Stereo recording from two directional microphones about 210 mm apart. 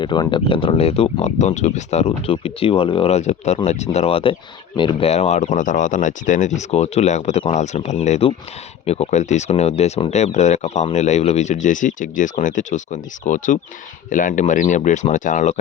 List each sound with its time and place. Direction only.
0.0 s speech: 20° left (ahead or behind)